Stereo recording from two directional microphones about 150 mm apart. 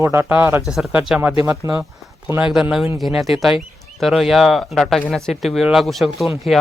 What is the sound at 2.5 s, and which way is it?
Speech, 5° right (ahead or behind).